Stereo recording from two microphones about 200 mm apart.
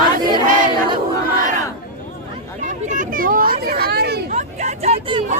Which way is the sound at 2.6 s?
40° right (ahead or behind).